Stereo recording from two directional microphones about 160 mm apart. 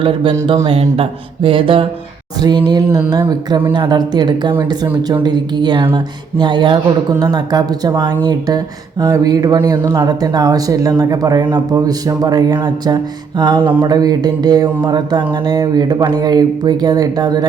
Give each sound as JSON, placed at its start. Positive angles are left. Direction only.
{"t": 0.0, "sound": "music", "side_deg": -35}
{"t": 2.4, "sound": "speech", "side_deg": -25}